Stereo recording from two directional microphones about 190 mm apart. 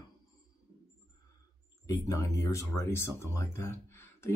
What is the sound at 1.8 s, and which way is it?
Speech, 20° left (ahead or behind).